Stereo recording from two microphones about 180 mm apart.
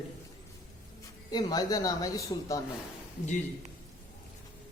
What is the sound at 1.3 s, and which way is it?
Speech, 20° left (ahead or behind).